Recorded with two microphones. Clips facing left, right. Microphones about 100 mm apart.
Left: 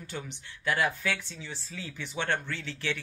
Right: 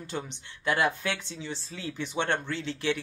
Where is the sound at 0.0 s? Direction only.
20° right (ahead or behind).